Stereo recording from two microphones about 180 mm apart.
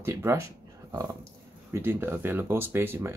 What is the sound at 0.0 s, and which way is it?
Speech, 15° right (ahead or behind).